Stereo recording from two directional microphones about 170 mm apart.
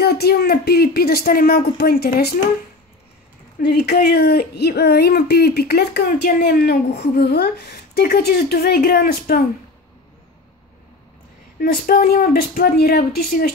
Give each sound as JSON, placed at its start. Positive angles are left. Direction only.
{"t": 0.0, "sound": "speech", "side_deg": 70}
{"t": 3.6, "sound": "speech", "side_deg": 70}
{"t": 11.6, "sound": "speech", "side_deg": 55}